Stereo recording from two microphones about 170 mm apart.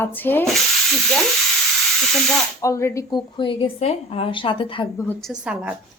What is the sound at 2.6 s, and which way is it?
A woman's voice, 15° left (ahead or behind).